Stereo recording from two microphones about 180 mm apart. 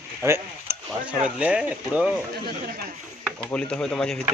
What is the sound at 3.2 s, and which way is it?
Speech, 5° left (ahead or behind).